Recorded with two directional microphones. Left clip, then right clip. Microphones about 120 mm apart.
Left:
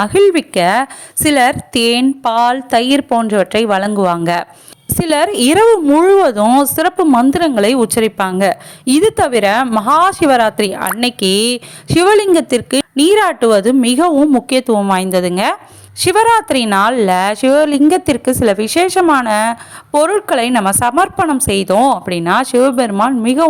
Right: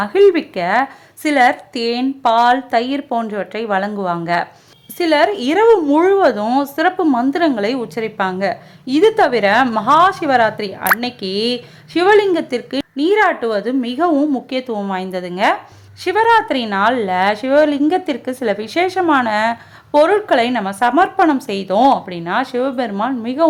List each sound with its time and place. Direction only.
0.0 s a woman's voice: 50° left (ahead or behind)
7.8 s a woman's voice: 70° left (ahead or behind); by 19.5 s 45° left (ahead or behind)
19.9 s a woman's voice: 55° left (ahead or behind)
21.8 s a woman's voice: 55° left (ahead or behind)